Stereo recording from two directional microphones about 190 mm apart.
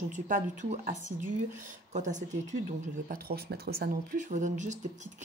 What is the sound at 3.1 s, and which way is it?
Speech, 55° right (ahead or behind).